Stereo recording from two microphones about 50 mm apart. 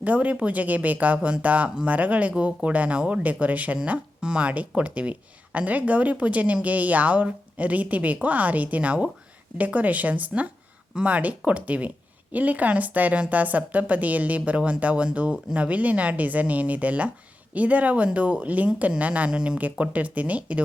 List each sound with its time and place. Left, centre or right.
0.0 s a woman's voice: right
4.2 s a woman's voice: centre
19.3 s speech: centre
19.8 s a woman's voice: right